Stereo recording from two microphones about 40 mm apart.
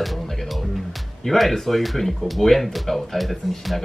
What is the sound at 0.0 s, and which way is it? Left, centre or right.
Speech, centre.